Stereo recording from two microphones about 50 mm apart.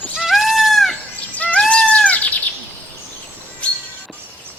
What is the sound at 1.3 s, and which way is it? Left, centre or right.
Bird, left.